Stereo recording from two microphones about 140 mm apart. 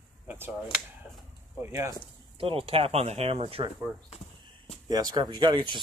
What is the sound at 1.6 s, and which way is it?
Speech, 20° right (ahead or behind).